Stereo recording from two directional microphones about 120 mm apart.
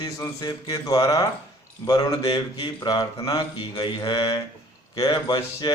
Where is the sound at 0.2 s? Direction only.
30° left (ahead or behind).